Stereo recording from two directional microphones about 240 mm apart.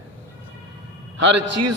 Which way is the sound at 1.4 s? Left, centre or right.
Right.